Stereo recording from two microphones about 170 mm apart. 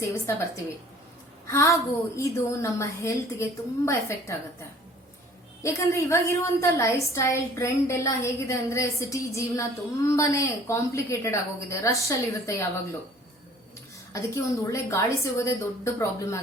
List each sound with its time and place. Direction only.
0.0 s a woman's voice: 15° left (ahead or behind)
5.6 s a woman's voice: 15° left (ahead or behind)
14.1 s a woman's voice: 20° left (ahead or behind)